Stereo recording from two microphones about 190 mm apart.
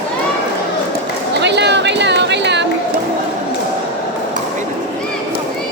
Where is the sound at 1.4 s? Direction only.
65° right (ahead or behind).